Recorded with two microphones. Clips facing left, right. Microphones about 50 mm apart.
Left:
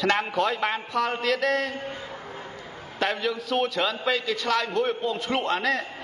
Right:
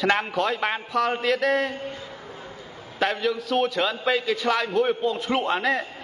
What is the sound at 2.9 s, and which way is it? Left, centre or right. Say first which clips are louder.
A man's voice: right 2 dB; centre.